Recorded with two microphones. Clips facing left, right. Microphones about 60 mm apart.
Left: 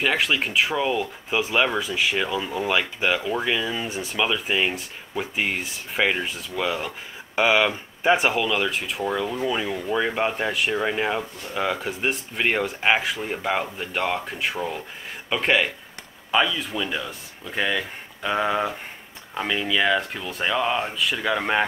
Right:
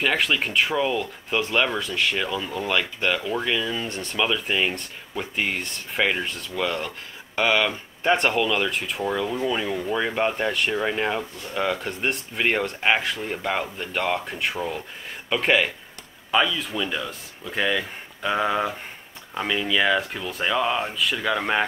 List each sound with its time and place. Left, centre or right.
0.0 s speech: centre